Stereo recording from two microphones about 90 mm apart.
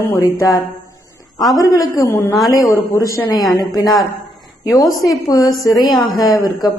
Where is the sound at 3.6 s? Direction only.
45° left (ahead or behind).